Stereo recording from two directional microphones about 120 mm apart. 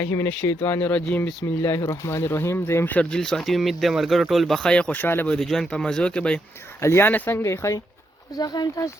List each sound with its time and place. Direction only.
0.0 s speech: 20° left (ahead or behind)